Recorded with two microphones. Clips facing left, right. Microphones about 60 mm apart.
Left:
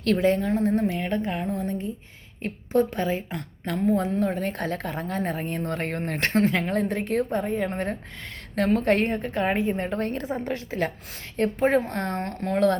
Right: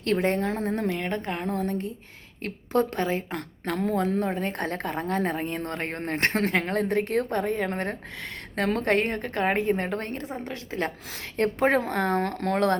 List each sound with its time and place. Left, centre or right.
0.0 s a woman's voice: right
4.4 s a woman's voice: right
6.3 s a woman's voice: right
6.6 s a woman's voice: right
10.2 s a woman's voice: left
11.3 s a woman's voice: right